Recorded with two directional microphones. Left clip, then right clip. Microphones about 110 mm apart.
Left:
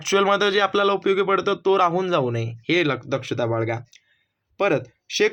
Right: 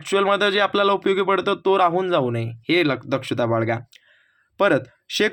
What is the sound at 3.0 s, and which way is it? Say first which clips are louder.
Speech: right 2 dB; 35° right (ahead or behind).